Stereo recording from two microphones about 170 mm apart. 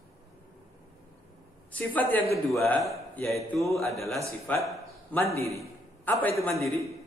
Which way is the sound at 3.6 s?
Centre (ahead or behind).